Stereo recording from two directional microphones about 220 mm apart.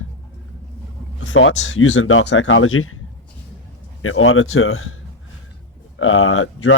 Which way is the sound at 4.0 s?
70° left (ahead or behind).